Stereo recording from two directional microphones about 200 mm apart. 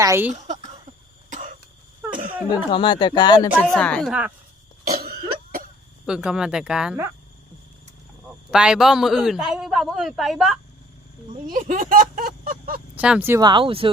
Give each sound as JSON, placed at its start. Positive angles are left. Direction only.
{"t": 0.0, "sound": "speech", "side_deg": -10}
{"t": 0.3, "sound": "a sound", "side_deg": -35}
{"t": 1.3, "sound": "cough", "side_deg": -40}
{"t": 2.5, "sound": "speech", "side_deg": 25}
{"t": 3.8, "sound": "a man's voice", "side_deg": 5}
{"t": 4.9, "sound": "cough", "side_deg": -50}
{"t": 6.1, "sound": "a man's voice", "side_deg": -5}
{"t": 8.4, "sound": "a man's voice", "side_deg": -5}
{"t": 11.4, "sound": "speech", "side_deg": -40}
{"t": 13.0, "sound": "speech", "side_deg": -5}